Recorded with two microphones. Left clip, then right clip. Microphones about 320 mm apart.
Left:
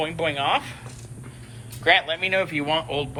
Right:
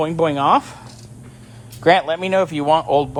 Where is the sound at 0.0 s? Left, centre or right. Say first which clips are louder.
Right 7 dB; centre.